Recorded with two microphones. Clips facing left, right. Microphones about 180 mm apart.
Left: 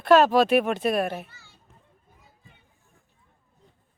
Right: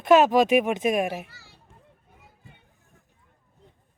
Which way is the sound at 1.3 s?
35° right (ahead or behind).